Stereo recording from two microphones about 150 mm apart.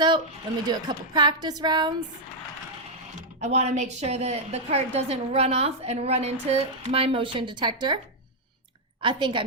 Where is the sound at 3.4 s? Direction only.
50° right (ahead or behind); by 7.9 s 30° right (ahead or behind).